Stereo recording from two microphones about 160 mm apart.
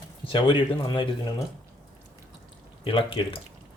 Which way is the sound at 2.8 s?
30° left (ahead or behind).